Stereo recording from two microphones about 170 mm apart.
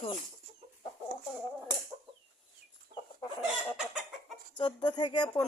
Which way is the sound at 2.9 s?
60° right (ahead or behind).